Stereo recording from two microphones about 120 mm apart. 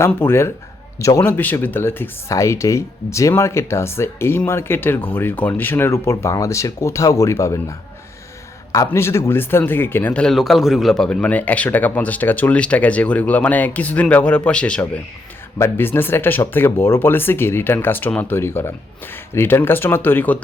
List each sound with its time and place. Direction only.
0.0 s a man's voice: 20° left (ahead or behind)
1.2 s speech: 15° left (ahead or behind)
10.2 s speech: centre (ahead or behind)
15.5 s speech: 20° left (ahead or behind)